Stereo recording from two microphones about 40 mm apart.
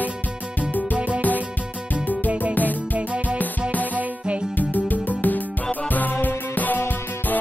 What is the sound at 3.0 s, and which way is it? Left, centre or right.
Music, right.